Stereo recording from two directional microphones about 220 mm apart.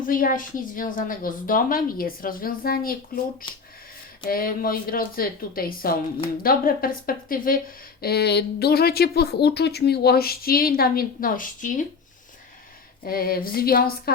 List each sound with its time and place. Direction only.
0.1 s a woman's voice: 40° left (ahead or behind)
13.1 s speech: 40° left (ahead or behind)